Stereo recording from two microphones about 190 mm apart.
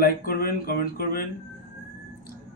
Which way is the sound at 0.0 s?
50° left (ahead or behind).